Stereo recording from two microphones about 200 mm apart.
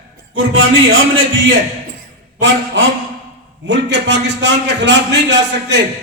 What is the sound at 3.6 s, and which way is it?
A man's voice, 60° right (ahead or behind).